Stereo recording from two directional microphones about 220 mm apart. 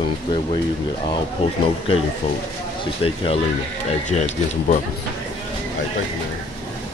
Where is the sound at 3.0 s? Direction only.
25° left (ahead or behind).